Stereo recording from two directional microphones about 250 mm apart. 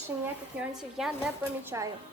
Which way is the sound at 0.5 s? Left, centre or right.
Centre.